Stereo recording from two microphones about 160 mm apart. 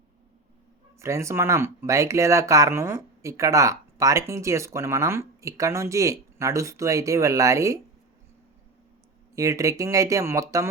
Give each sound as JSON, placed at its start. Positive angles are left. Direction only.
{"t": 0.9, "sound": "speech", "side_deg": -20}
{"t": 9.3, "sound": "speech", "side_deg": -20}